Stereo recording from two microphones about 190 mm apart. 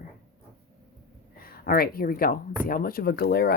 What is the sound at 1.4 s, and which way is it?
Speech, 50° left (ahead or behind).